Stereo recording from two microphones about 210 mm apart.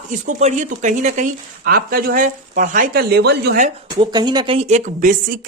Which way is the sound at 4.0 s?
20° right (ahead or behind).